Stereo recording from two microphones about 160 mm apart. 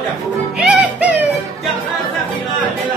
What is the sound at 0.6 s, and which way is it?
Music, 10° right (ahead or behind).